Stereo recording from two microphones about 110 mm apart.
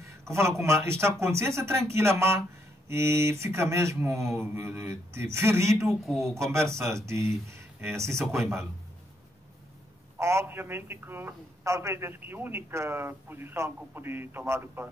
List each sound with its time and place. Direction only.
0.0 s a man's voice: 25° right (ahead or behind)
10.1 s a man's voice: 25° right (ahead or behind)